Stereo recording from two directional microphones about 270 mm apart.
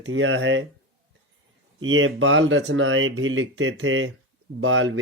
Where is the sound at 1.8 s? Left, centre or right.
Right.